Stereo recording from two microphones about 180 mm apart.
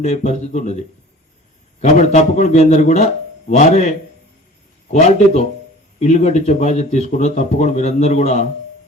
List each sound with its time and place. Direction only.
0.0 s speech: 40° left (ahead or behind)
1.8 s speech: 40° left (ahead or behind)